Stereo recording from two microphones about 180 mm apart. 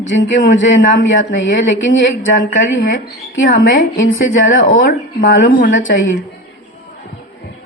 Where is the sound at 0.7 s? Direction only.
85° left.